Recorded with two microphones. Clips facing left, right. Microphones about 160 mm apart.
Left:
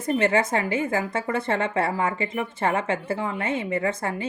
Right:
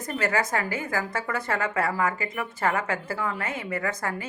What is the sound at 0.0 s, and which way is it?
A woman's voice, 25° left (ahead or behind).